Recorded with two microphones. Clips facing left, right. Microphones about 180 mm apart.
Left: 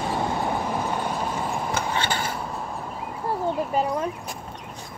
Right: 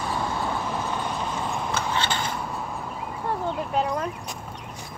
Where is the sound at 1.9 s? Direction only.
10° left (ahead or behind).